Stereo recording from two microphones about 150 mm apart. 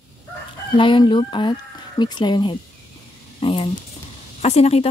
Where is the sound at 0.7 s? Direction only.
35° left (ahead or behind).